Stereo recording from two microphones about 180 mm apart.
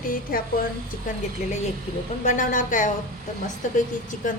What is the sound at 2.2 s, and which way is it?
A woman's voice, 45° left (ahead or behind).